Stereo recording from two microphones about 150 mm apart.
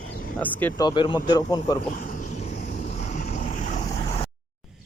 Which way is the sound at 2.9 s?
55° left (ahead or behind).